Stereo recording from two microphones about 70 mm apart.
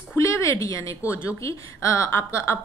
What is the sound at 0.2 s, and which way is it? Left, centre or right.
A woman's voice, left.